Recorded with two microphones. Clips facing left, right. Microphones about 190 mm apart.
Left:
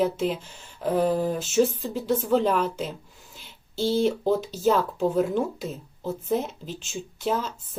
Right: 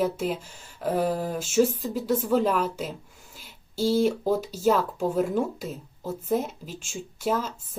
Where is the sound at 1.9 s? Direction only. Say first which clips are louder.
Left 1 dB; 5° right (ahead or behind).